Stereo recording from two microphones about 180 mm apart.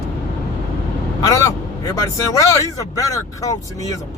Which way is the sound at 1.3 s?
20° left (ahead or behind).